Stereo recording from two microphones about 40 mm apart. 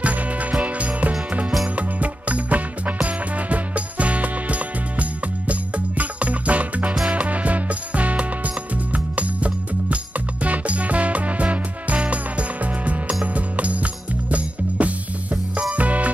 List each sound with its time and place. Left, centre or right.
0.0 s music: right
14.8 s music: right